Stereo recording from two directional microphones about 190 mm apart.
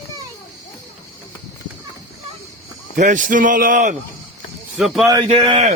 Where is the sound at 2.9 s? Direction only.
40° right (ahead or behind).